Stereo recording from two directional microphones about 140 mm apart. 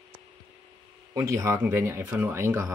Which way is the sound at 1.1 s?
25° right (ahead or behind).